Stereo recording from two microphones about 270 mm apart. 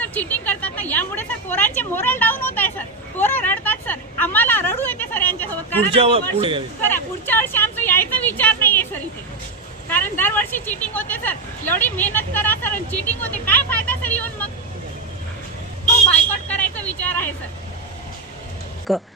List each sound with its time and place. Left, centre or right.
0.0 s speech: centre
5.9 s a man's voice: right
6.8 s speech: centre
13.5 s vehicle: centre
16.5 s vehicle: centre
18.9 s speech: centre